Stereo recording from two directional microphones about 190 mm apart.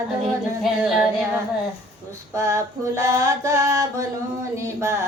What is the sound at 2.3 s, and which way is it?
Child singing, 15° right (ahead or behind).